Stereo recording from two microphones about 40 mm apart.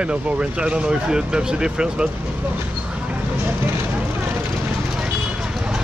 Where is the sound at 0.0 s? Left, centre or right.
Right.